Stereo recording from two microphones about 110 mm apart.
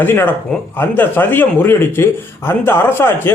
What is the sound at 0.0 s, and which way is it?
A man's voice, 20° left (ahead or behind).